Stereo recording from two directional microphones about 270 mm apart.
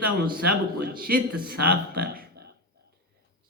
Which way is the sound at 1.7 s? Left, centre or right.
Right.